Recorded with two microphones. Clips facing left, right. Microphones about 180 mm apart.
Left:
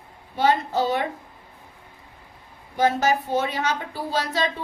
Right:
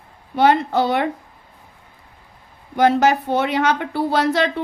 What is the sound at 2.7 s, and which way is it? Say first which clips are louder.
Speech: right 5 dB; 65° right (ahead or behind).